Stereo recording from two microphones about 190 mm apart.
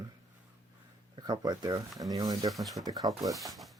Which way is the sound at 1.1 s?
20° right (ahead or behind).